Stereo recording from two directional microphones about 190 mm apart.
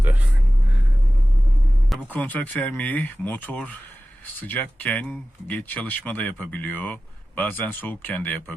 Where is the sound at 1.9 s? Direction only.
10° left (ahead or behind).